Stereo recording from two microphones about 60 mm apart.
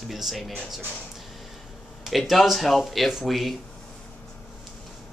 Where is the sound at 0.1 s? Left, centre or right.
Centre.